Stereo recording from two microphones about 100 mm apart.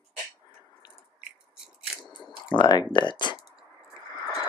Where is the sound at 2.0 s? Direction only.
50° left (ahead or behind).